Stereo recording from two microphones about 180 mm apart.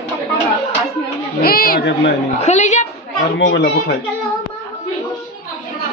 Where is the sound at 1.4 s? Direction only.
55° left (ahead or behind).